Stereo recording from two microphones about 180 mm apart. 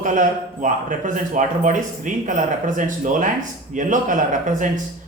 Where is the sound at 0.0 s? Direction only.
45° right (ahead or behind).